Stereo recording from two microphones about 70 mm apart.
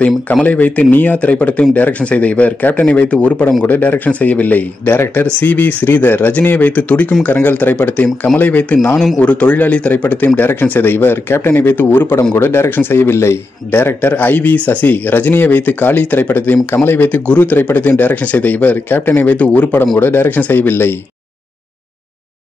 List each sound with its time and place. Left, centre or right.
0.0 s a man's voice: centre
8.9 s speech: centre
9.2 s a man's voice: centre